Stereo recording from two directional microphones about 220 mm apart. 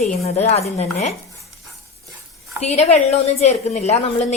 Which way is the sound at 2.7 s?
30° left (ahead or behind).